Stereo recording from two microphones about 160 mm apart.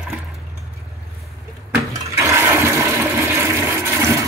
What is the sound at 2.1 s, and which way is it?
Toilet flush, 15° right (ahead or behind).